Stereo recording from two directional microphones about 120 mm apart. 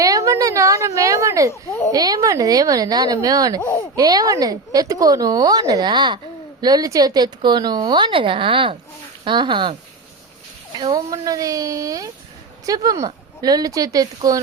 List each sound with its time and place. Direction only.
0.0 s a sound: 30° right (ahead or behind)
1.9 s a woman's voice: 30° right (ahead or behind)
3.6 s speech: 30° left (ahead or behind)
3.9 s a woman's voice: 30° right (ahead or behind)
10.8 s a woman's voice: 30° right (ahead or behind)